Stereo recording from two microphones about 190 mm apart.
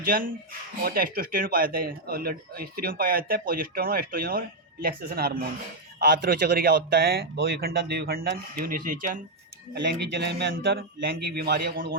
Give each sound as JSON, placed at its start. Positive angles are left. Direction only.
{"t": 0.0, "sound": "speech", "side_deg": -50}
{"t": 9.8, "sound": "speech", "side_deg": -55}